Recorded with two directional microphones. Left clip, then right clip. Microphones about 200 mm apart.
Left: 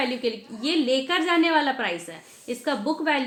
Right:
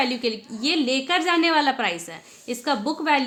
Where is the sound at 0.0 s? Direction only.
40° right (ahead or behind).